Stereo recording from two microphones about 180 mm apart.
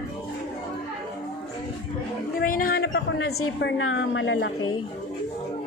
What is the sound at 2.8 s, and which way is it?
A woman's voice, 75° left (ahead or behind).